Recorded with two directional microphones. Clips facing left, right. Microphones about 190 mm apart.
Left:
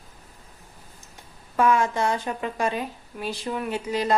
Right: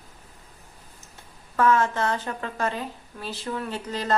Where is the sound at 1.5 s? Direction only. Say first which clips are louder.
Even; 15° left (ahead or behind).